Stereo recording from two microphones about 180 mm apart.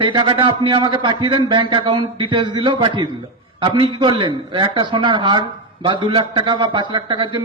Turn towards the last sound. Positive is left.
turn(degrees=-25)  # may be behind; listen again after turning